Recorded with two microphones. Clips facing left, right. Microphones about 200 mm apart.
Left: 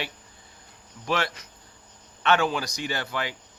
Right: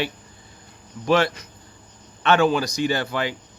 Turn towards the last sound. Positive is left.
turn(degrees=-30)  # may be behind; listen again after turning